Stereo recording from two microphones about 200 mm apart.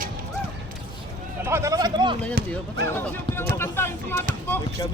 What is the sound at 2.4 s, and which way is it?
Speech, 50° right (ahead or behind).